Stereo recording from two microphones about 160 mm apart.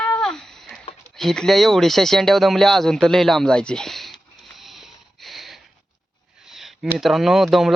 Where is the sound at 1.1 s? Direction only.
5° left (ahead or behind).